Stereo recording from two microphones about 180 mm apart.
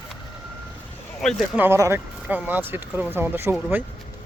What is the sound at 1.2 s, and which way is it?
Speech, 5° left (ahead or behind).